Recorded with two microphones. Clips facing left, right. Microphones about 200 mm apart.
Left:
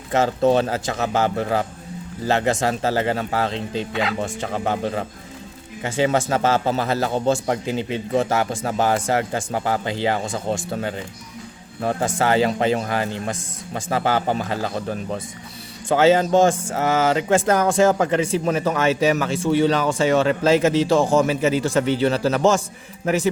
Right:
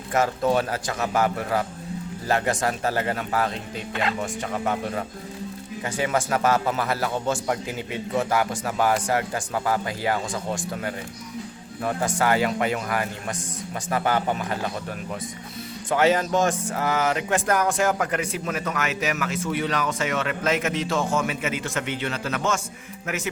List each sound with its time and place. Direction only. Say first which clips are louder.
0.1 s a man's voice: left 4 dB; 25° left (ahead or behind)